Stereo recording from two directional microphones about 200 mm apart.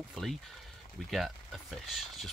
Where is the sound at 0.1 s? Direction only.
Centre (ahead or behind).